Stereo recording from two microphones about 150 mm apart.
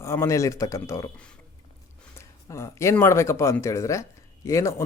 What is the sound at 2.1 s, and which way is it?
Speech, 20° left (ahead or behind).